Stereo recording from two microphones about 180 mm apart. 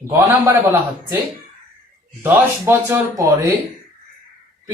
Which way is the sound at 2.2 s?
15° right (ahead or behind).